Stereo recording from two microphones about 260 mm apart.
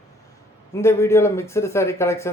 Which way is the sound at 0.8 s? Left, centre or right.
Centre.